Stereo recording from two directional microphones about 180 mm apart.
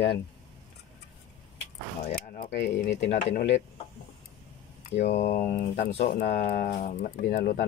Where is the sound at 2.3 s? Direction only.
60° left (ahead or behind).